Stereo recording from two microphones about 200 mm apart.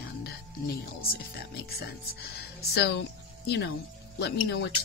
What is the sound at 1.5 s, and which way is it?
Speech, 50° left (ahead or behind).